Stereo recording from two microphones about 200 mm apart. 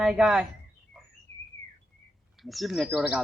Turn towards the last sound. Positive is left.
turn(degrees=0)  # may be behind; listen again after turning